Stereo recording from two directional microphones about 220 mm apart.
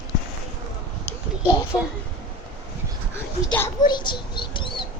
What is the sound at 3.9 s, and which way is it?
Mouse, 20° left (ahead or behind).